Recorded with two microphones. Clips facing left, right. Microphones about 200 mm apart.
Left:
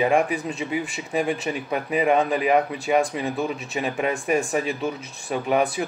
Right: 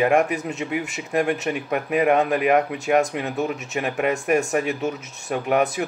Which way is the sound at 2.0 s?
5° right (ahead or behind).